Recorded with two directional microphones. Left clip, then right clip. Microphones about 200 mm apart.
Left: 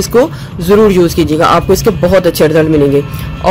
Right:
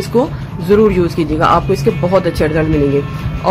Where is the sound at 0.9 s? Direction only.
40° left (ahead or behind).